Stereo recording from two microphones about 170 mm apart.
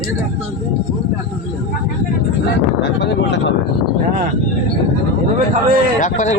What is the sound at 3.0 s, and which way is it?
Speech, 90° left.